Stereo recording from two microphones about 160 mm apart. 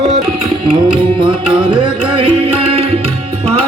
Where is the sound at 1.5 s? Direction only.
30° right (ahead or behind).